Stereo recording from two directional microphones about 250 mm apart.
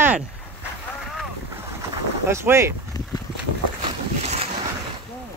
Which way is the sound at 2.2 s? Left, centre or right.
Centre.